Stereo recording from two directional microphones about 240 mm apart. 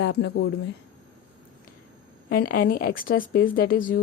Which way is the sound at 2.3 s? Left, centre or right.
Left.